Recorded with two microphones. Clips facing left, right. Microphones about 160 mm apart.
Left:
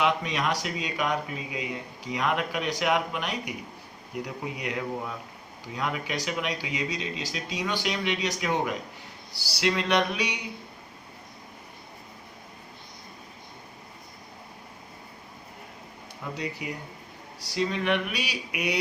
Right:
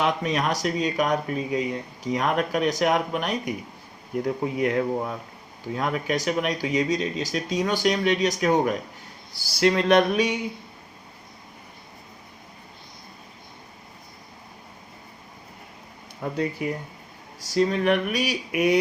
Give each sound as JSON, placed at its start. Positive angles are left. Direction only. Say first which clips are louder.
{"t": 0.0, "sound": "speech", "louder": "right 2 dB", "side_deg": -40}
{"t": 16.4, "sound": "speech", "louder": "right 8 dB", "side_deg": -50}